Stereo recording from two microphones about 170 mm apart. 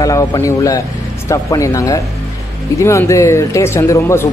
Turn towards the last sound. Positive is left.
turn(degrees=15)  # may be behind; listen again after turning